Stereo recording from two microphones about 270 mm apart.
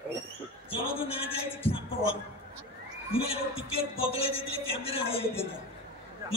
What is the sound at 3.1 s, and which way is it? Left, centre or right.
A man's voice, left.